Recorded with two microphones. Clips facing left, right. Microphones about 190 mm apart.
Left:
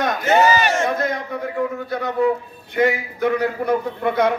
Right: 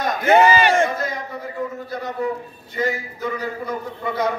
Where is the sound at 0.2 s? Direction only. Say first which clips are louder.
Right 3 dB; 55° right (ahead or behind).